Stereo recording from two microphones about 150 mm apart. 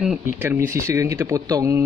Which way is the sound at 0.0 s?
10° right (ahead or behind).